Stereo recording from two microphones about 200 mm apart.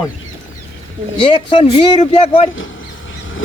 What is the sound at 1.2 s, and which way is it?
Speech, 25° left (ahead or behind).